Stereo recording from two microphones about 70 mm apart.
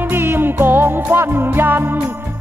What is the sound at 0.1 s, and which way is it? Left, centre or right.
Music, right.